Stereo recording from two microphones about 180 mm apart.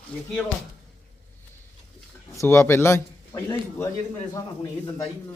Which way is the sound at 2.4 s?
15° left (ahead or behind).